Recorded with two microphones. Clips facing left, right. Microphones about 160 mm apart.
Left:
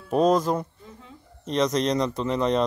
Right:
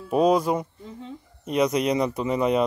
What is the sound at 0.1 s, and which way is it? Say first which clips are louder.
Speech: right 1 dB; 10° right (ahead or behind).